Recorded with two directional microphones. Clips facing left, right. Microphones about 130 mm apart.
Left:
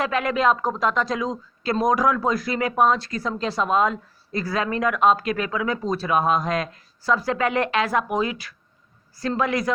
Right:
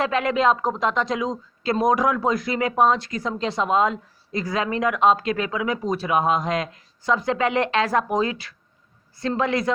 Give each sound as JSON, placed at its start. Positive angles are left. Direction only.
{"t": 0.0, "sound": "speech", "side_deg": -25}